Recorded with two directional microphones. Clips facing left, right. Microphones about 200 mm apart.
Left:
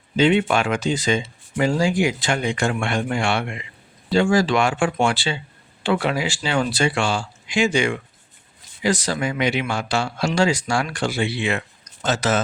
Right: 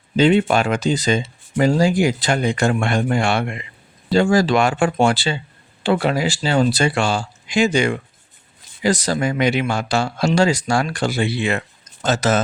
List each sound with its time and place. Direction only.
0.2 s speech: 40° right (ahead or behind)